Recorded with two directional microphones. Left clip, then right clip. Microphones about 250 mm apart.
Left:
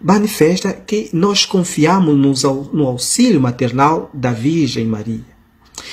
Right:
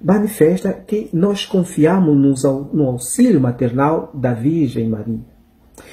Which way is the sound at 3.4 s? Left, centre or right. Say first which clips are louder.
Left 3 dB; centre.